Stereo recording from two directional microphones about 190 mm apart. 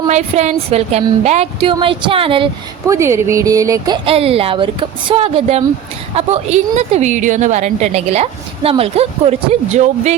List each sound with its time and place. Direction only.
0.1 s speech: 35° right (ahead or behind)
2.8 s a woman's voice: 15° right (ahead or behind); by 10.2 s 35° right (ahead or behind)